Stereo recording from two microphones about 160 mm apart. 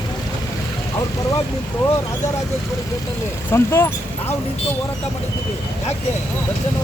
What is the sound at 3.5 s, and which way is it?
Speech, 15° left (ahead or behind).